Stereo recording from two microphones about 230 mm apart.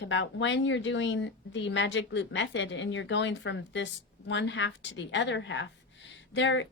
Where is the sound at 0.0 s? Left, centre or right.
Left.